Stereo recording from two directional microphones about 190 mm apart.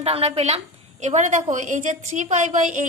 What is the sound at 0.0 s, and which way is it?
A woman's voice, 30° right (ahead or behind).